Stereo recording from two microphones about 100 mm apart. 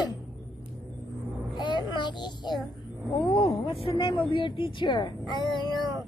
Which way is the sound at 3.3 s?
60° left (ahead or behind).